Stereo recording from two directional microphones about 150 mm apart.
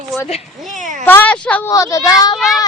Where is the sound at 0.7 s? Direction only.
55° right (ahead or behind).